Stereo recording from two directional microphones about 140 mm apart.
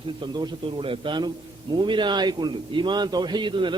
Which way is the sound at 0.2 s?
35° right (ahead or behind).